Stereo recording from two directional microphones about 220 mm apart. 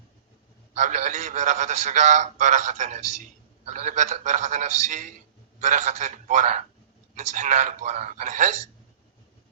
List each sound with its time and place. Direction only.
0.7 s a man's voice: 35° right (ahead or behind)